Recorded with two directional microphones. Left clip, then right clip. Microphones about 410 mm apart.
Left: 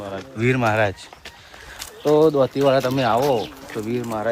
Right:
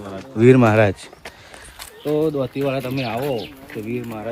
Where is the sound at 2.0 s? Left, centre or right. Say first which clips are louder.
Left 5 dB; left.